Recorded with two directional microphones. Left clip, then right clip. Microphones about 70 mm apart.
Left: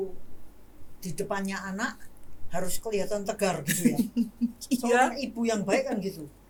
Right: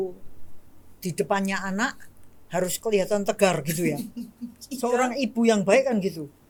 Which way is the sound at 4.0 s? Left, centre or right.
Centre.